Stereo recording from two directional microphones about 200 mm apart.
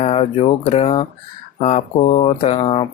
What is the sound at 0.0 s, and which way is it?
Speech, 30° left (ahead or behind).